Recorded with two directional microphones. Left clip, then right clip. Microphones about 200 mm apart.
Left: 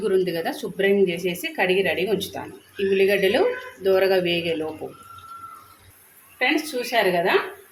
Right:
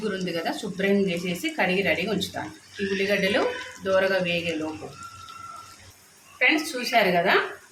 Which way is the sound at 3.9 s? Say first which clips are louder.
Left 1 dB; 20° left (ahead or behind).